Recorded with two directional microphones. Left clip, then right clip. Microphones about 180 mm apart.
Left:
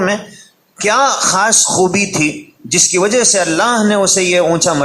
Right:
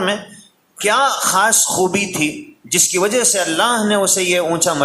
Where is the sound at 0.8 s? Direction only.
20° left (ahead or behind).